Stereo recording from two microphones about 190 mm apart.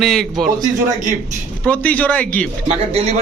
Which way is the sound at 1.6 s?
5° left (ahead or behind).